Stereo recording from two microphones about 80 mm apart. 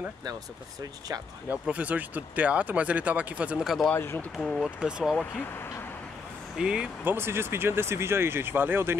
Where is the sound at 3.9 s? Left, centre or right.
Left.